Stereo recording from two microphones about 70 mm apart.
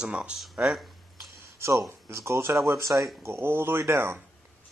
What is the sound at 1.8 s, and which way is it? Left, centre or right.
Speech, right.